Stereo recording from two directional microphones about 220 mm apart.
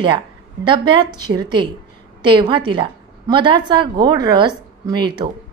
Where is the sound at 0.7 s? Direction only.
20° right (ahead or behind).